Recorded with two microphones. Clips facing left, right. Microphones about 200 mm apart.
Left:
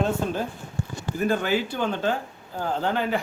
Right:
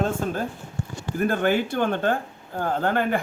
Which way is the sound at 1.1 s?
55° right (ahead or behind).